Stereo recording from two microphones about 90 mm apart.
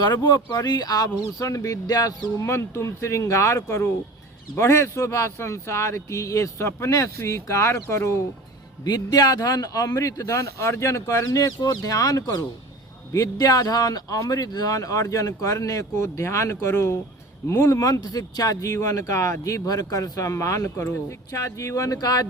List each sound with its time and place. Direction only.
0.0 s speech: 55° left (ahead or behind); by 8.1 s 30° left (ahead or behind)
8.8 s speech: 45° left (ahead or behind)